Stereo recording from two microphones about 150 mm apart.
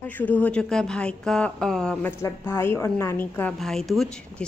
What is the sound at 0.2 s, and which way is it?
A woman's voice, 10° left (ahead or behind).